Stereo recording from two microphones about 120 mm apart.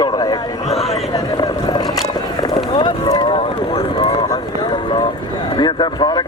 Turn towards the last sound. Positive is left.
turn(degrees=40)  # may be behind; listen again after turning